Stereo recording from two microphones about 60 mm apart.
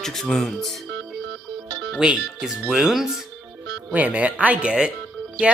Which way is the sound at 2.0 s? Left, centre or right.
Centre.